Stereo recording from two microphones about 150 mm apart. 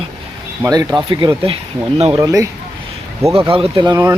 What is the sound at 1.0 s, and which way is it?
Speech, 35° right (ahead or behind).